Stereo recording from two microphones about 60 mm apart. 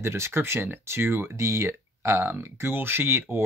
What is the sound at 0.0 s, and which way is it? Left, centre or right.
Speech, right.